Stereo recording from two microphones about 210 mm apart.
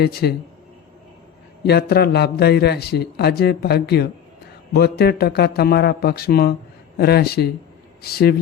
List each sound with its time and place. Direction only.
0.0 s a man's voice: 50° left (ahead or behind)
1.6 s a man's voice: 50° left (ahead or behind)